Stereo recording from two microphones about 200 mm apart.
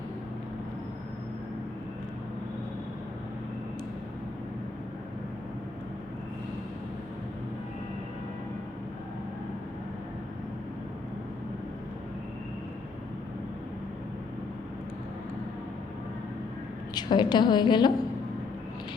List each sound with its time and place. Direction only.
16.9 s a woman's voice: 20° left (ahead or behind)